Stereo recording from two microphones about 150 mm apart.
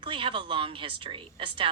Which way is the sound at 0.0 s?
35° right (ahead or behind).